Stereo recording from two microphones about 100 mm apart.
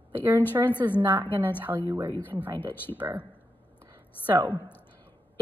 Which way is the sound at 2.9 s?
15° right (ahead or behind).